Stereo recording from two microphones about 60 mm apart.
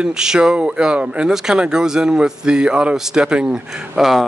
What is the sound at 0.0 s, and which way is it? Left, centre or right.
Speech, centre.